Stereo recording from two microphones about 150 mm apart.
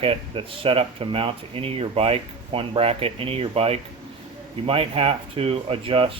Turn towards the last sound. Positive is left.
turn(degrees=-40)  # may be behind; listen again after turning